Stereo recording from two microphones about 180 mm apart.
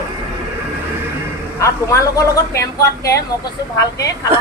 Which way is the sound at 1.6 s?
15° left (ahead or behind).